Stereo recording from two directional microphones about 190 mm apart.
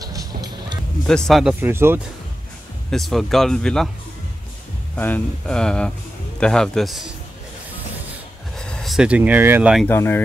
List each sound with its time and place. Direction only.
0.0 s music: 20° right (ahead or behind)
1.0 s speech: centre (ahead or behind)
2.9 s speech: centre (ahead or behind)
4.9 s speech: 10° left (ahead or behind)
8.5 s speech: 5° left (ahead or behind)
9.8 s speech: 10° left (ahead or behind)